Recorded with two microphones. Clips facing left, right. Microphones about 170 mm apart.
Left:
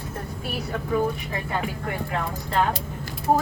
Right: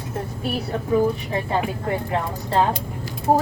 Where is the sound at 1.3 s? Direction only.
30° right (ahead or behind).